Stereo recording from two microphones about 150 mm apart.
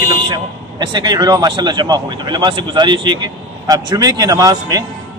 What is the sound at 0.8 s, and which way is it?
Speech, 30° right (ahead or behind).